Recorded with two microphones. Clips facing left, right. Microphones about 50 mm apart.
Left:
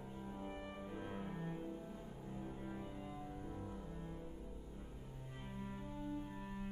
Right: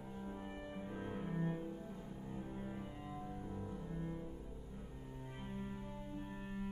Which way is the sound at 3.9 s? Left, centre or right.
Centre.